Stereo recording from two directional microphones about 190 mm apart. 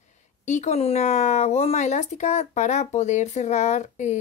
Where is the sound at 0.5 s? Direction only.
35° left (ahead or behind).